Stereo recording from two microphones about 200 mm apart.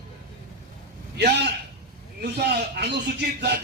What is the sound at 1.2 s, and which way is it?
A man's voice, 55° right (ahead or behind).